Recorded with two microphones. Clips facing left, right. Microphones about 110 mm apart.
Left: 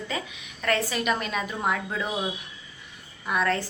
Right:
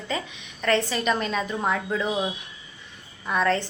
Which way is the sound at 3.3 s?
5° left (ahead or behind).